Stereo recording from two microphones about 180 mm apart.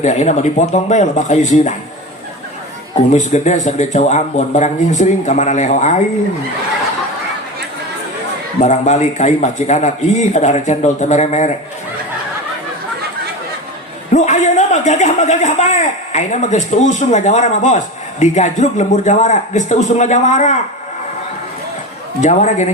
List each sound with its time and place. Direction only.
0.0 s a man's voice: 40° left (ahead or behind)
3.1 s a man's voice: 40° left (ahead or behind)
8.6 s a man's voice: 40° left (ahead or behind)
14.1 s a man's voice: 40° left (ahead or behind)
22.2 s a man's voice: 40° left (ahead or behind)